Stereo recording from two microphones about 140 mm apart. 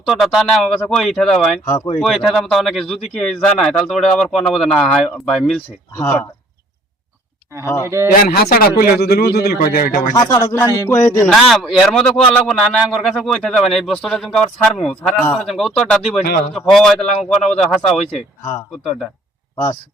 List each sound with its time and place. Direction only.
0.1 s speech: centre (ahead or behind)
1.6 s speech: 20° left (ahead or behind)
2.0 s speech: centre (ahead or behind)
7.6 s a sound: 20° left (ahead or behind)
8.2 s a man's voice: 90° left
10.2 s speech: 30° left (ahead or behind)
10.4 s speech: 20° left (ahead or behind)
10.8 s a sound: 20° left (ahead or behind)
11.3 s speech: centre (ahead or behind)